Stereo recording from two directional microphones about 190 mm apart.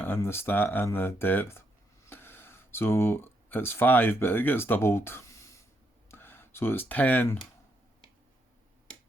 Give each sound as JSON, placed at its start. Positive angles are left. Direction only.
{"t": 0.0, "sound": "speech", "side_deg": 10}